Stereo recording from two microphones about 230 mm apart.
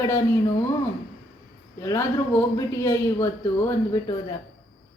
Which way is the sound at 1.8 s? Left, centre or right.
Centre.